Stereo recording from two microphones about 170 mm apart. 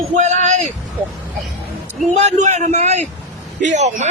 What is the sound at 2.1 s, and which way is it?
A man's voice, 40° right (ahead or behind).